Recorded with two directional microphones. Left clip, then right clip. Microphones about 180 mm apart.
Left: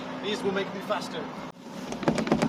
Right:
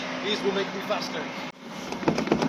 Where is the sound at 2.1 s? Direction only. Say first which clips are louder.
Right 1 dB; 15° left (ahead or behind).